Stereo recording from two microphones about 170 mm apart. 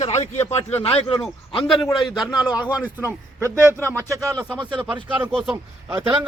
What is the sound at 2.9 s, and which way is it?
A man's voice, 10° right (ahead or behind).